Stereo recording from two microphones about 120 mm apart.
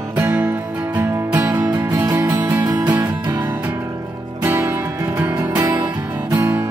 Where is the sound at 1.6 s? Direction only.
30° right (ahead or behind).